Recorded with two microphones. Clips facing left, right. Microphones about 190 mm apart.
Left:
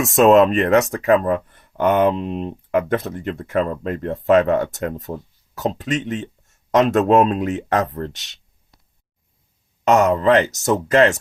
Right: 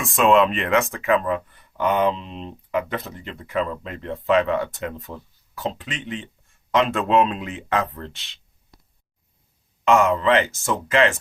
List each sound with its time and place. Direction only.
0.0 s speech: 40° left (ahead or behind)
9.8 s speech: 40° left (ahead or behind)